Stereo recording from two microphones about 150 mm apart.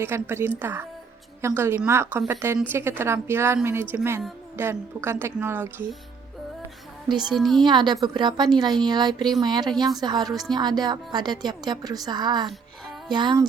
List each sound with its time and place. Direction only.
0.0 s a woman's voice: 15° right (ahead or behind)
7.2 s a woman's voice: centre (ahead or behind)
7.6 s a woman's voice: 30° right (ahead or behind)